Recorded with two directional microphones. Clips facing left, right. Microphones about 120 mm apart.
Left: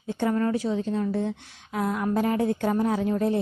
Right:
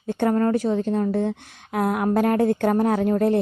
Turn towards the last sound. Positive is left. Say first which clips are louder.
# right 5 dB
turn(degrees=-55)  # may be behind; listen again after turning